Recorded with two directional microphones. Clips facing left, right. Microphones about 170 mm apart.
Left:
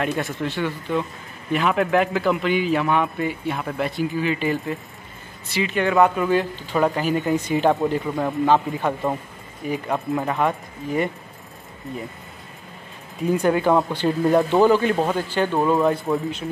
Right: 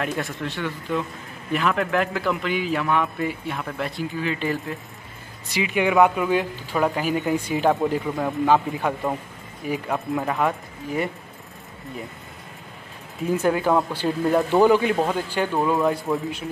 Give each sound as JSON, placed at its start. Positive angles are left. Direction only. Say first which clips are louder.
{"t": 0.0, "sound": "a man's voice", "louder": "left 3 dB", "side_deg": 0}
{"t": 5.5, "sound": "a man's voice", "louder": "even", "side_deg": -10}
{"t": 13.3, "sound": "speech", "louder": "left 2 dB", "side_deg": 0}
{"t": 15.0, "sound": "a man's voice", "louder": "left 1 dB", "side_deg": 0}
{"t": 15.2, "sound": "speech", "louder": "left 2 dB", "side_deg": -10}
{"t": 15.6, "sound": "a man's voice", "louder": "left 2 dB", "side_deg": 0}